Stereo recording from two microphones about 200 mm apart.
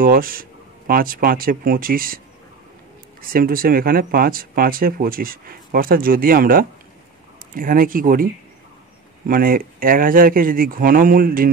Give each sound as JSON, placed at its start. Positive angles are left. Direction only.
{"t": 0.0, "sound": "speech", "side_deg": -45}
{"t": 9.3, "sound": "speech", "side_deg": -45}